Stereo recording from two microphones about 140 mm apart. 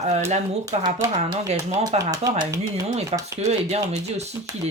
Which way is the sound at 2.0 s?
25° right (ahead or behind).